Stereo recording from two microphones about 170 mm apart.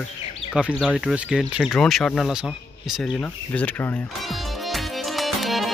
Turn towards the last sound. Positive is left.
turn(degrees=0)  # may be behind; listen again after turning